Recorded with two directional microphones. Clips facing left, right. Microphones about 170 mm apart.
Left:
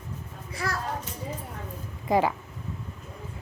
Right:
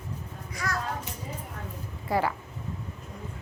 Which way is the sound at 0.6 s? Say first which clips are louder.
Left 1 dB; 30° left (ahead or behind).